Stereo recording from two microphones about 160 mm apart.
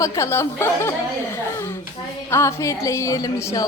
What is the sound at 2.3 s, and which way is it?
A woman's voice, 15° left (ahead or behind).